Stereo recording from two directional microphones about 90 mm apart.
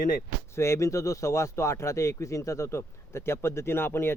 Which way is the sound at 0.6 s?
35° left (ahead or behind).